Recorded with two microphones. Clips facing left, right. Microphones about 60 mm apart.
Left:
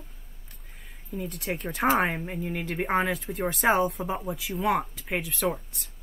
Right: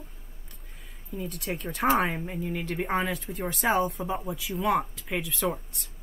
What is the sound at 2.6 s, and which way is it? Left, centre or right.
Speech, centre.